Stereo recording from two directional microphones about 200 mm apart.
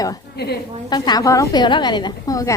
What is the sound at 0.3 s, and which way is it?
Speech, 55° left (ahead or behind).